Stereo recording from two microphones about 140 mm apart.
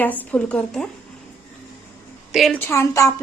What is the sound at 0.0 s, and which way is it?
Speech, 10° left (ahead or behind).